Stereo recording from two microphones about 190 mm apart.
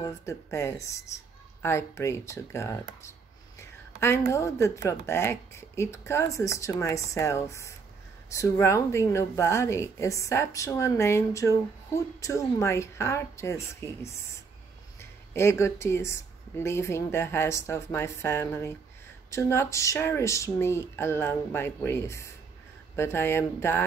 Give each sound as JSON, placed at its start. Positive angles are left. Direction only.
{"t": 0.0, "sound": "speech", "side_deg": 15}